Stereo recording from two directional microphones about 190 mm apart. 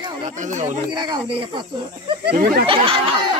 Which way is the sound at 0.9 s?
25° right (ahead or behind).